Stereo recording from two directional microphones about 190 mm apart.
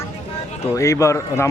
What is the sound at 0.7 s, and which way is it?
Speech, 15° left (ahead or behind).